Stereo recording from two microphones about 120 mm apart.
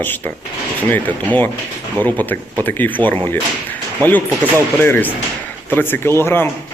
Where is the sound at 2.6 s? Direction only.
15° left (ahead or behind).